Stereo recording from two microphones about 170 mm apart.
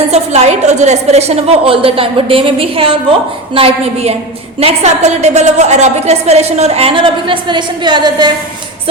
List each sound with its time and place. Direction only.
0.1 s a woman's voice: 40° right (ahead or behind)